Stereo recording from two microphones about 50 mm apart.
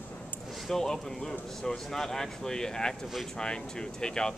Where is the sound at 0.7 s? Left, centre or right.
Centre.